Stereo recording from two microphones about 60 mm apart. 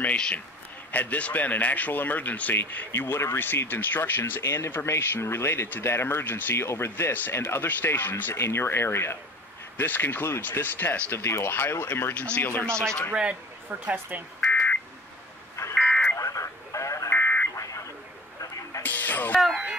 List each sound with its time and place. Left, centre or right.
0.0 s speech: centre; by 9.2 s left
9.8 s speech: left
11.9 s speech: left
12.6 s a man's voice: centre
13.1 s speech: centre
14.5 s buzzer: left
16.2 s a sound: left
17.1 s buzzer: left
18.8 s music: left